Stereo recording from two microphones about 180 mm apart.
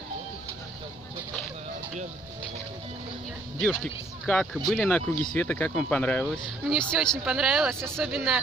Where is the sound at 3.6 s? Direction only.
5° left (ahead or behind).